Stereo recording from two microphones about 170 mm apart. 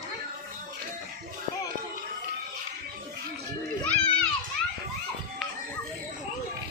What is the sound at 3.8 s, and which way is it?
Music, 10° left (ahead or behind).